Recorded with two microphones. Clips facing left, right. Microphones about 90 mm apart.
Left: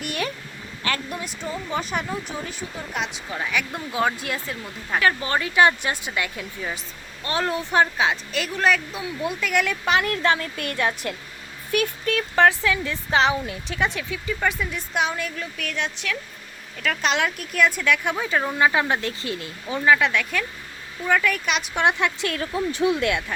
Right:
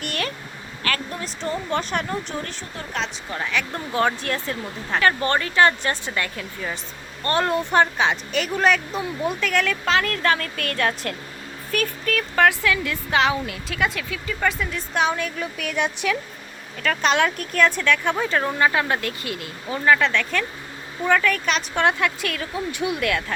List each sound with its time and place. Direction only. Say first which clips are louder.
0.0 s a sound: even; 10° left (ahead or behind)
0.9 s speech: right 1 dB; 20° left (ahead or behind)
14.9 s speech: right 3 dB; centre (ahead or behind)
16.8 s speech: right 3 dB; centre (ahead or behind); by 19.5 s 30° left (ahead or behind)
19.6 s speech: even; 10° left (ahead or behind)